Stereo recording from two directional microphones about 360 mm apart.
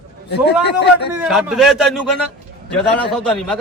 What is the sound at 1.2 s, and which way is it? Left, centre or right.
A man's voice, centre.